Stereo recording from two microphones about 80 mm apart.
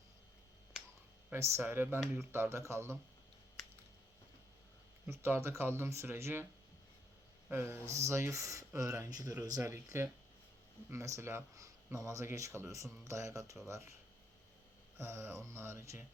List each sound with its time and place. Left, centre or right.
1.3 s speech: right
5.0 s speech: right
7.5 s speech: right
9.6 s speech: right
14.9 s speech: right